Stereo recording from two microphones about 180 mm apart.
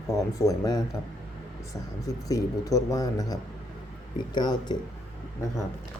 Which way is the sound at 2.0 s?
20° left (ahead or behind).